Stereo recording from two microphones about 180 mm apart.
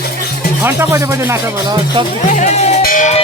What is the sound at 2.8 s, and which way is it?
Music, 50° left (ahead or behind).